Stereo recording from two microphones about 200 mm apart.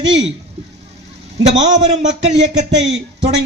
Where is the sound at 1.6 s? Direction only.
35° right (ahead or behind).